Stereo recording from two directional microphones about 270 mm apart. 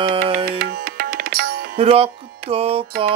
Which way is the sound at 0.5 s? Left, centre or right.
Right.